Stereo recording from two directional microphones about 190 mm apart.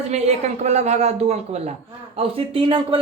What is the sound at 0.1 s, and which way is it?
Speech, 35° right (ahead or behind).